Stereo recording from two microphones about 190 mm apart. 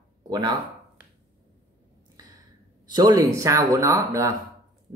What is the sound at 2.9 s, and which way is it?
Speech, 20° right (ahead or behind).